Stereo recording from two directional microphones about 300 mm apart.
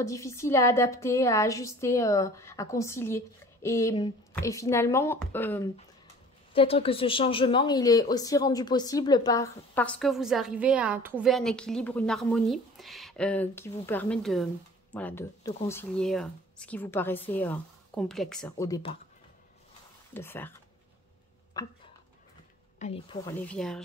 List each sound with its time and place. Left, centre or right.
0.0 s a woman's voice: centre
6.5 s speech: centre
20.2 s a woman's voice: centre
21.5 s speech: centre
22.8 s speech: left
23.2 s speech: centre